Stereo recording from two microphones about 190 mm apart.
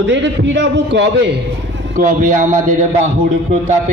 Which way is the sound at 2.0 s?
45° right (ahead or behind).